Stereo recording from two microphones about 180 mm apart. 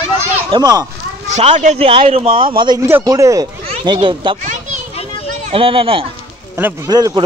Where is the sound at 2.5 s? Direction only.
20° right (ahead or behind).